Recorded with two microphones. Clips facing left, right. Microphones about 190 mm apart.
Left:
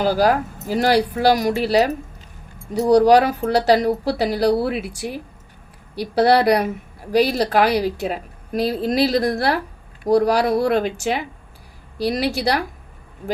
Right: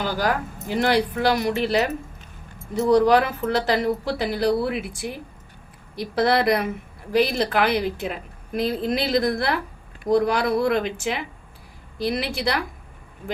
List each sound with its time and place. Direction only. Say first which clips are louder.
0.0 s a woman's voice: left 7 dB; 35° left (ahead or behind)